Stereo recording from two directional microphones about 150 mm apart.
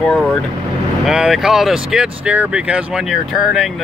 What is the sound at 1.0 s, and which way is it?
Speech, 5° right (ahead or behind).